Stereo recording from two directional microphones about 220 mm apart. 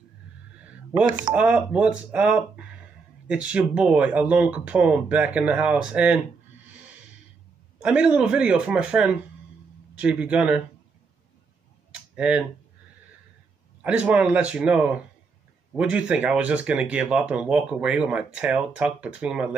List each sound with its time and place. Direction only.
1.3 s speech: 5° right (ahead or behind)
7.8 s speech: 5° right (ahead or behind)
11.9 s a sound: 5° right (ahead or behind)
13.8 s speech: 5° right (ahead or behind)